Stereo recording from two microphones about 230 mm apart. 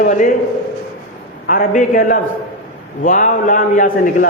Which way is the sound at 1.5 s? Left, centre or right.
Left.